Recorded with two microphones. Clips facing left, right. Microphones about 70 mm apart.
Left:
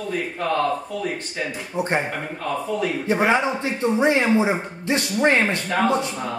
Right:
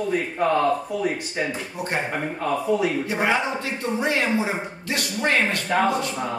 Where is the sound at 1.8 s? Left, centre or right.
Left.